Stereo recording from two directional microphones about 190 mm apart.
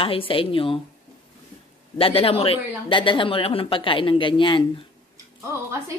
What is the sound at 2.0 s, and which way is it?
A woman's voice, 30° left (ahead or behind).